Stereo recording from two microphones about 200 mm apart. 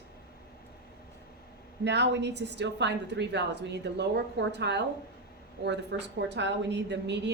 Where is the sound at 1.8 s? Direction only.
60° right (ahead or behind).